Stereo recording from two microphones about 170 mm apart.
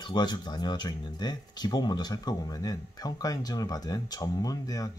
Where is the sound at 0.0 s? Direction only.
25° left (ahead or behind).